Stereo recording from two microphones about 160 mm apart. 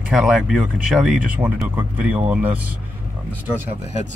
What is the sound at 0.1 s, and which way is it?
Speech, 5° right (ahead or behind).